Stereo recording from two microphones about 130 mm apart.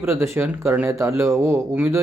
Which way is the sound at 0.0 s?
20° right (ahead or behind).